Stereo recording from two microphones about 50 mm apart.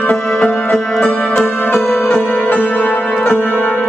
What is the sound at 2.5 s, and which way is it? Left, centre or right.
Music, left.